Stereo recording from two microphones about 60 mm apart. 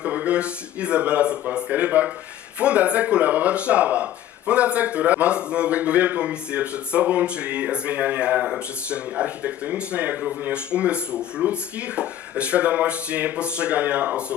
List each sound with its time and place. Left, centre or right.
0.0 s speech: right